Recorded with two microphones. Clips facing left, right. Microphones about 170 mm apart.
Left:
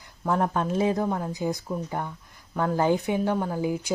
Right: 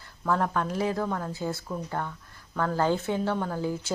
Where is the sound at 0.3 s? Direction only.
20° left (ahead or behind).